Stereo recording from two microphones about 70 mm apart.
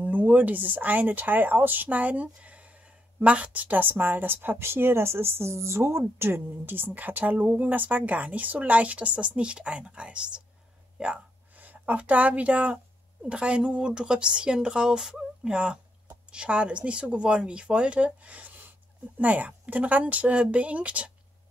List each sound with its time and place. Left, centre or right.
0.0 s speech: right